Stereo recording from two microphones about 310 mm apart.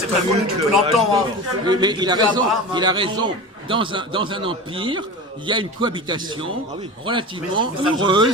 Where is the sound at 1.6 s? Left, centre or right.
Centre.